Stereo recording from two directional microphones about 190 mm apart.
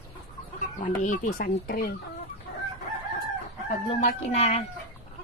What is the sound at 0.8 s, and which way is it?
Speech, 45° left (ahead or behind).